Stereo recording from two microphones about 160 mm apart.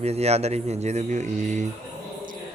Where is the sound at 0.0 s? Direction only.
40° right (ahead or behind).